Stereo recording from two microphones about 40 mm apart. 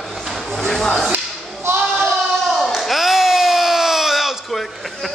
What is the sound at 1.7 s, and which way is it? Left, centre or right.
Speech, right.